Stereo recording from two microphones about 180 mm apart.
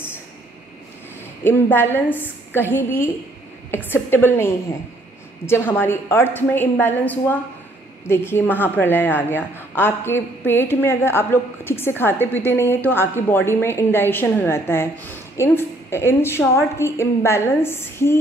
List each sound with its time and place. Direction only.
1.4 s a woman's voice: 10° left (ahead or behind)